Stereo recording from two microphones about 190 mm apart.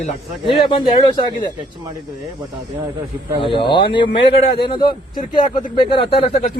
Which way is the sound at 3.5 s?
25° left (ahead or behind).